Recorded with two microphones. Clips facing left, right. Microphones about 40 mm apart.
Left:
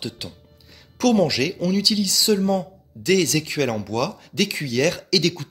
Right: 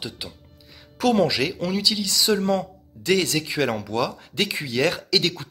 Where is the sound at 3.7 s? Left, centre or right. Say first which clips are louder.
Left 1 dB; right.